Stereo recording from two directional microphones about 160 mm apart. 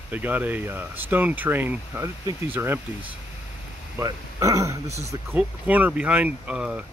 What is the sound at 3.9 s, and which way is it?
Speech, 20° right (ahead or behind).